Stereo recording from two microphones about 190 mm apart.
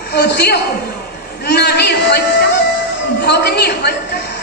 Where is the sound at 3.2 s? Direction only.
60° left (ahead or behind).